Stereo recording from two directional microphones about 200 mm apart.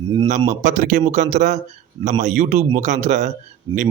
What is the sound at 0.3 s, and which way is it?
Speech, 35° right (ahead or behind).